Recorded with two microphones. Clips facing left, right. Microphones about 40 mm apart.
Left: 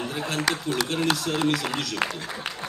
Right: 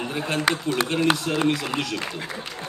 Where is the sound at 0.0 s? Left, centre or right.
Centre.